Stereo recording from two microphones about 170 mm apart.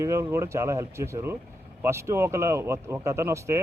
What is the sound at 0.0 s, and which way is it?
Speech, 15° right (ahead or behind).